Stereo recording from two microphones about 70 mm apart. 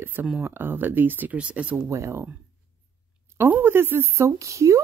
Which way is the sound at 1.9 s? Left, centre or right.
Right.